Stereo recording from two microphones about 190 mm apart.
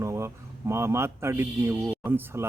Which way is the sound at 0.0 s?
15° right (ahead or behind).